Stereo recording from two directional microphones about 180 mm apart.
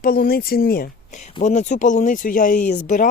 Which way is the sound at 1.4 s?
40° left (ahead or behind).